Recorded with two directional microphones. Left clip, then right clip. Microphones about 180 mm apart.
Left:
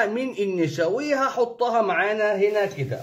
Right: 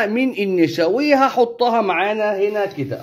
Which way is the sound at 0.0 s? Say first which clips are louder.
Right 4 dB; 35° right (ahead or behind).